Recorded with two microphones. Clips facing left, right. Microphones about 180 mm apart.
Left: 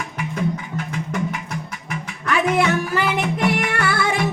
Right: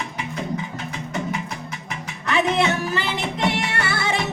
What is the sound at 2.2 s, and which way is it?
Music, 25° right (ahead or behind).